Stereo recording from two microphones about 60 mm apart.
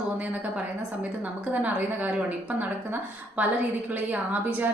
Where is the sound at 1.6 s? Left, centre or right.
Right.